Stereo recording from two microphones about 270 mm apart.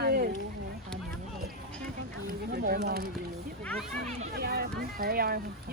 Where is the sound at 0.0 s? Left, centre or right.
Right.